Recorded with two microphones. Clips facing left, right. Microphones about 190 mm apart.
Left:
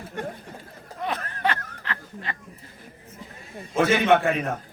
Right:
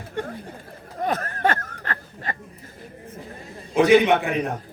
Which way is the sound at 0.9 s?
45° right (ahead or behind).